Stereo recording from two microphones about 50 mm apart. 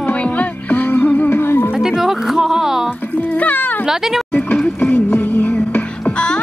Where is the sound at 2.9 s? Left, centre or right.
Left.